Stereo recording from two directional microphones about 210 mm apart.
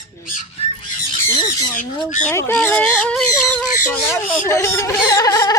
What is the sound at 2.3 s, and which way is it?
Speech, 10° left (ahead or behind).